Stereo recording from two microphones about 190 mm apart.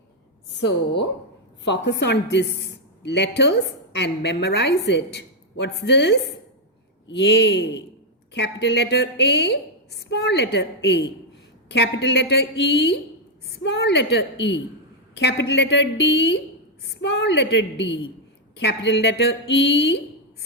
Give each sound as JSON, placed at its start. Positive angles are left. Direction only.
{"t": 0.5, "sound": "a woman's voice", "side_deg": 65}